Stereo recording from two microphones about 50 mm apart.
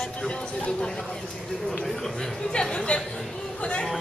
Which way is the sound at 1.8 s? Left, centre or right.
Centre.